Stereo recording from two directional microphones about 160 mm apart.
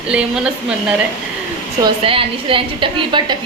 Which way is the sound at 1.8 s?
35° right (ahead or behind).